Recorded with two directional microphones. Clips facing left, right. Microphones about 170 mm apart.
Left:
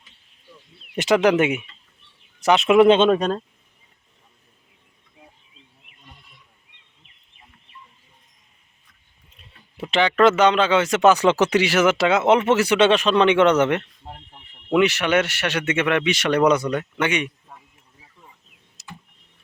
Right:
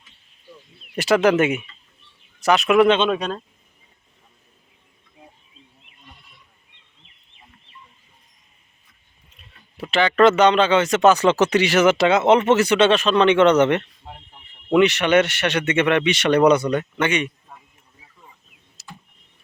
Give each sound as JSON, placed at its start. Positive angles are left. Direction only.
{"t": 0.9, "sound": "speech", "side_deg": 20}
{"t": 3.0, "sound": "speech", "side_deg": 45}
{"t": 9.9, "sound": "speech", "side_deg": 15}
{"t": 18.8, "sound": "power windows", "side_deg": 20}